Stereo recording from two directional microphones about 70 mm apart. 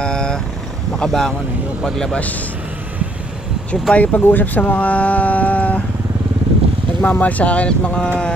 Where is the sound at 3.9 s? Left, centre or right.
Left.